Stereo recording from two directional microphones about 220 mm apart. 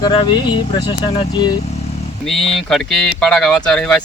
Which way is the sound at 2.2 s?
Centre (ahead or behind).